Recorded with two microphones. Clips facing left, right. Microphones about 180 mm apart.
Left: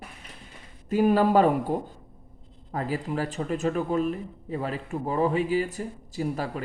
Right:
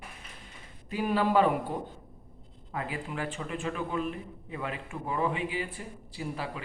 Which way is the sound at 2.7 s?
40° left (ahead or behind).